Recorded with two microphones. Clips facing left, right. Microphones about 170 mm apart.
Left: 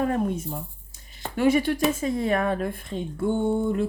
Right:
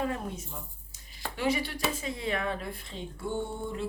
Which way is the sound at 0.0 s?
50° left (ahead or behind).